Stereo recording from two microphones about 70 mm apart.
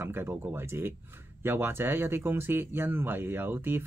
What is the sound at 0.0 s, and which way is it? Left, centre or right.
Speech, right.